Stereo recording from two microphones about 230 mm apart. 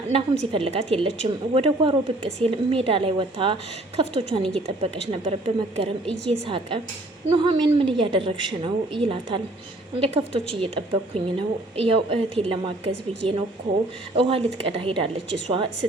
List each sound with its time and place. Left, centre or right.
0.1 s speech: right